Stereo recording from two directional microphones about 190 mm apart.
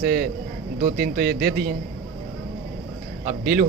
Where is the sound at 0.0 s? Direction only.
55° right (ahead or behind).